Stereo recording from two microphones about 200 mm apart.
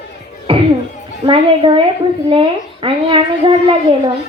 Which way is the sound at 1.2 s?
25° right (ahead or behind).